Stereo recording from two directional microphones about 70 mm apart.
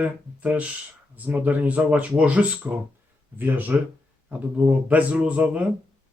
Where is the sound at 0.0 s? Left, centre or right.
Right.